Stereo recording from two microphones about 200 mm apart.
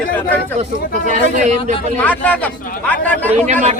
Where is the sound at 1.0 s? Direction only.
35° right (ahead or behind).